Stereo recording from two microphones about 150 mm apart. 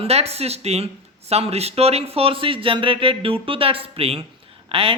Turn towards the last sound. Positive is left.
turn(degrees=-40)  # may be behind; listen again after turning